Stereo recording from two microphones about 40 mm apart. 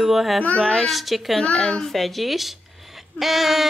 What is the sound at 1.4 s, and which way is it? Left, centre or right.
Speech, left.